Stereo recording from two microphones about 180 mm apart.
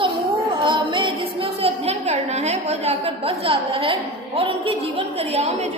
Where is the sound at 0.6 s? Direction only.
25° right (ahead or behind).